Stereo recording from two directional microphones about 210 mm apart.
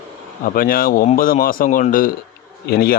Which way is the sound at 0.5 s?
45° left (ahead or behind).